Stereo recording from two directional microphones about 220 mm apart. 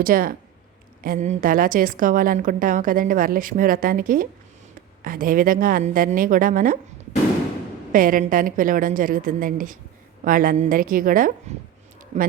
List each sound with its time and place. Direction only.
0.0 s a woman's voice: 40° right (ahead or behind)
7.9 s a woman's voice: 40° right (ahead or behind)